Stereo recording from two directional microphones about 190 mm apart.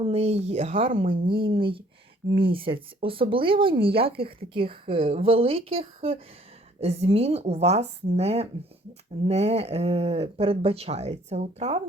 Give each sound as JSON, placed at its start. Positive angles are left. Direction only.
{"t": 0.0, "sound": "a woman's voice", "side_deg": -35}